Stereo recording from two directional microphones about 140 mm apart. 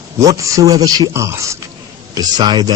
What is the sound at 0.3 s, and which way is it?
Speech, 25° right (ahead or behind).